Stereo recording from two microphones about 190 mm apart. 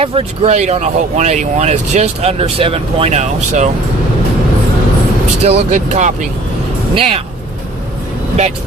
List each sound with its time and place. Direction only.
0.0 s speech: 30° right (ahead or behind)
5.4 s speech: 35° right (ahead or behind)